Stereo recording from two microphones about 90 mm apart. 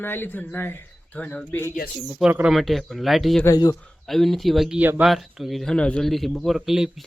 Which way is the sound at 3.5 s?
45° left (ahead or behind).